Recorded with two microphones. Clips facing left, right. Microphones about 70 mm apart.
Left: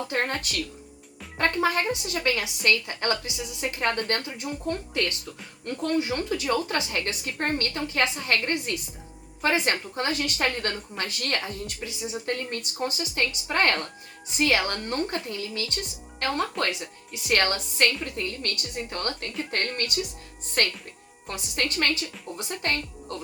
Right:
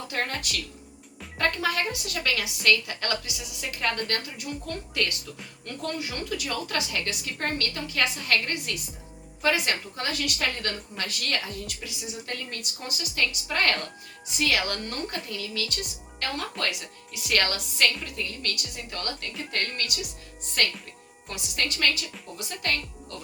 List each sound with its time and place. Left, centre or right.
0.1 s a woman's voice: left